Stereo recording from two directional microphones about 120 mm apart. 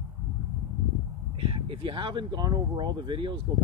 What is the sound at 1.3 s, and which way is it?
Speech, 45° right (ahead or behind).